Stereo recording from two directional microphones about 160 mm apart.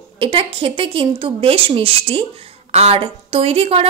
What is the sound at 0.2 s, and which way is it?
A woman's voice, 35° right (ahead or behind).